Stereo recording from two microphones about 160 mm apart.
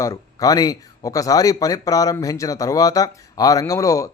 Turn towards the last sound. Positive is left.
turn(degrees=20)  # may be behind; listen again after turning